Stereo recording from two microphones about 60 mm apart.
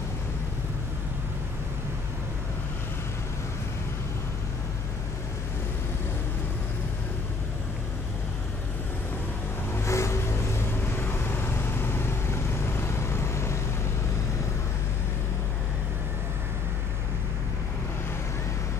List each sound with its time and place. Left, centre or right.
9.8 s music: left
10.7 s vehicle: left